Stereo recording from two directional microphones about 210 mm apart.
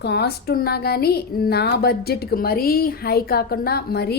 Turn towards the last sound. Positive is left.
turn(degrees=50)  # may be behind; listen again after turning